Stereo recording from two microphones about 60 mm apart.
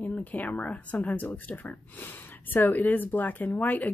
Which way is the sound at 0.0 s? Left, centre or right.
Left.